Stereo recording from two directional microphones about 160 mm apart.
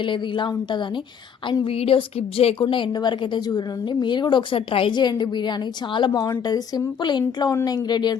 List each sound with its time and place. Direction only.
0.0 s a woman's voice: 30° left (ahead or behind)